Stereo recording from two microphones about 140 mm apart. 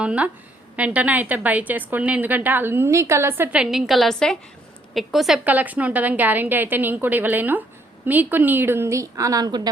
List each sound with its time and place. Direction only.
0.0 s a woman's voice: 10° right (ahead or behind); by 9.6 s 30° right (ahead or behind)